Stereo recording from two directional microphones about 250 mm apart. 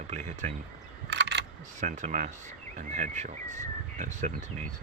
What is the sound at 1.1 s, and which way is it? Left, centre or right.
Single-lens reflex camera, right.